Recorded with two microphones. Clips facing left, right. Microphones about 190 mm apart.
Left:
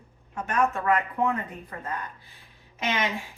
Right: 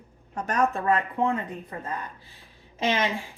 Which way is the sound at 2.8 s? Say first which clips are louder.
Right 3 dB; 30° right (ahead or behind).